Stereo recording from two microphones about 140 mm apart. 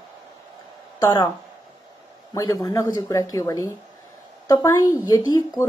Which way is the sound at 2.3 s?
25° left (ahead or behind).